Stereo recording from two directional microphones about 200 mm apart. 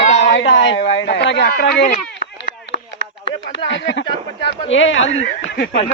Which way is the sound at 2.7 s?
60° left (ahead or behind).